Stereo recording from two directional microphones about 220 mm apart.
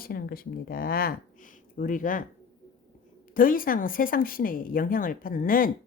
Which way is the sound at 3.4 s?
40° left (ahead or behind).